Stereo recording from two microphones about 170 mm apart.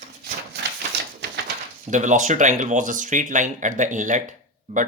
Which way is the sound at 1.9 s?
45° right (ahead or behind).